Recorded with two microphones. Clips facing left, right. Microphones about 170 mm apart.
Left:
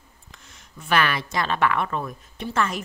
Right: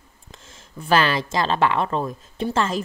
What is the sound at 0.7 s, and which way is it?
Speech, 30° right (ahead or behind).